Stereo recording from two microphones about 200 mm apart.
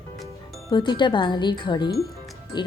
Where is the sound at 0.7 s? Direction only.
20° left (ahead or behind).